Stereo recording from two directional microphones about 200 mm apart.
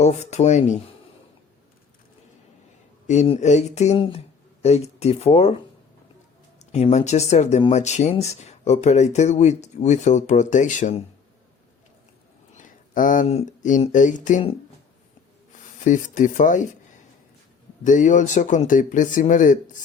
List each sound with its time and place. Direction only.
0.0 s speech: 35° left (ahead or behind)
3.1 s speech: 35° left (ahead or behind)
12.5 s speech: 40° left (ahead or behind)
15.8 s speech: 40° left (ahead or behind)
17.8 s speech: 40° left (ahead or behind)